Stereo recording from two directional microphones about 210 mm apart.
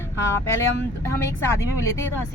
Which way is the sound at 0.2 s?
15° left (ahead or behind).